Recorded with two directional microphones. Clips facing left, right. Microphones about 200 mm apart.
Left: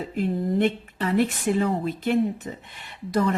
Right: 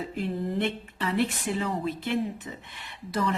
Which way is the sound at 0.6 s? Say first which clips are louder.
Left 6 dB; 45° left (ahead or behind).